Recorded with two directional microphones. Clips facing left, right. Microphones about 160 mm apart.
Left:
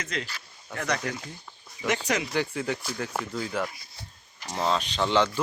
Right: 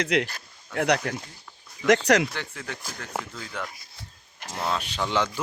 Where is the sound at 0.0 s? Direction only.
70° right (ahead or behind).